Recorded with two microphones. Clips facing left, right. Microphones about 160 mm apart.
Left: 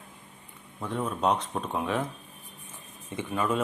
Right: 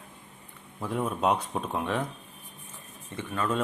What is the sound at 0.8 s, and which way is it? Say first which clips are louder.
Speech: right 1 dB; 5° right (ahead or behind).